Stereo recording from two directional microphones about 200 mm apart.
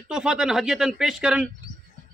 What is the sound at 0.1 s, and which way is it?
A man's voice, 5° right (ahead or behind).